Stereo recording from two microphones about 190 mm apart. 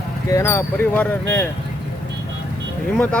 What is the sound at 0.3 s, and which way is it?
Speech, 15° left (ahead or behind).